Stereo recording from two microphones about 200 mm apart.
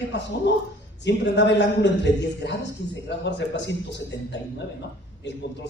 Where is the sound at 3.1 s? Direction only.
60° left (ahead or behind).